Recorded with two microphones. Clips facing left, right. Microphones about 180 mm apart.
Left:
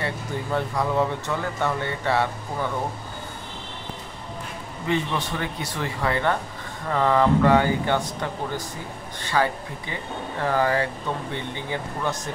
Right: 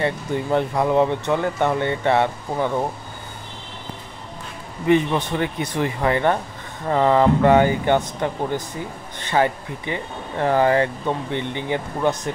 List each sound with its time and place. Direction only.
0.0 s speech: 20° right (ahead or behind)
4.8 s speech: 15° right (ahead or behind)